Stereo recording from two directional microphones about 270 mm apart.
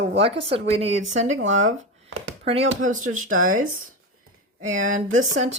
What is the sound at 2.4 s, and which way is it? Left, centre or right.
Speech, right.